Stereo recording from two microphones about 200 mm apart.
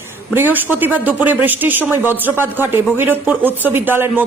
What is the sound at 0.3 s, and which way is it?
Speech, 10° right (ahead or behind).